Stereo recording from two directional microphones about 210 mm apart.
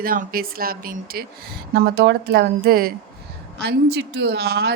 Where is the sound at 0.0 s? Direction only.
45° right (ahead or behind).